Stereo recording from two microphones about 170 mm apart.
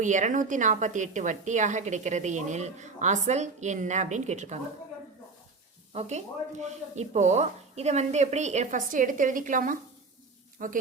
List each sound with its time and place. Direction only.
0.0 s a woman's voice: 45° right (ahead or behind)
5.9 s a woman's voice: 40° right (ahead or behind)